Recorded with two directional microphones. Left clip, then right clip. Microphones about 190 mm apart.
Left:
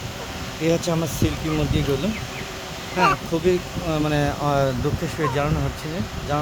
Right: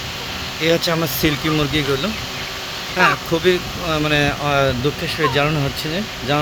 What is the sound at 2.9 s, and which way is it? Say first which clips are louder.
Speech: right 4 dB; centre (ahead or behind).